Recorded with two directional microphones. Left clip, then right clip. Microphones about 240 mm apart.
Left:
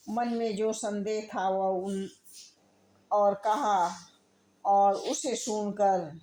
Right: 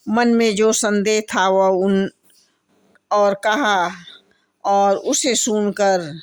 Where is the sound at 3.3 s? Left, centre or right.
Right.